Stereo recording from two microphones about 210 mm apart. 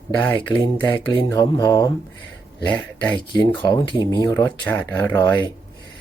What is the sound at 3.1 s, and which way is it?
Speech, 20° left (ahead or behind).